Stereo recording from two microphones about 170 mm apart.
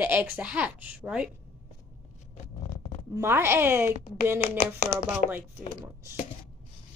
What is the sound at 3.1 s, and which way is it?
Speech, 15° right (ahead or behind).